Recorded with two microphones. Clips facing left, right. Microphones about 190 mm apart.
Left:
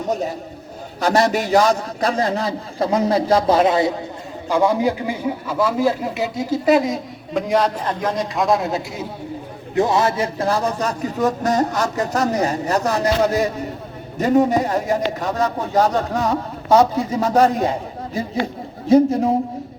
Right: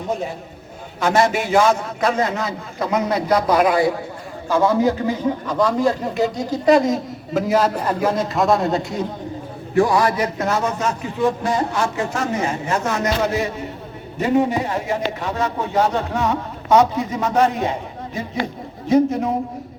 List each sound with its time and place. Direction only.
0.1 s a man's voice: 40° left (ahead or behind); by 9.0 s centre (ahead or behind)
9.7 s a man's voice: 25° left (ahead or behind)